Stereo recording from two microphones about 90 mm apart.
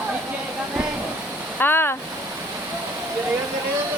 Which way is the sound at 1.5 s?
20° left (ahead or behind).